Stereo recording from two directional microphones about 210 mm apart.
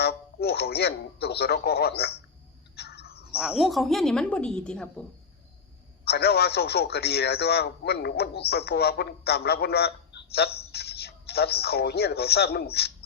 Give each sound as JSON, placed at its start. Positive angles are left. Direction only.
{"t": 0.0, "sound": "a man's voice", "side_deg": 50}
{"t": 2.7, "sound": "a sound", "side_deg": 50}
{"t": 3.3, "sound": "a woman's voice", "side_deg": -5}
{"t": 6.1, "sound": "a man's voice", "side_deg": 50}